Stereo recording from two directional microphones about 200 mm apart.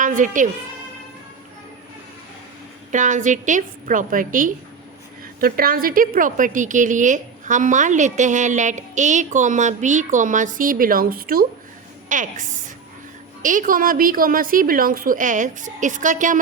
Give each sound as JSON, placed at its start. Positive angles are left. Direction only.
{"t": 0.0, "sound": "a woman's voice", "side_deg": -40}
{"t": 2.9, "sound": "a woman's voice", "side_deg": -40}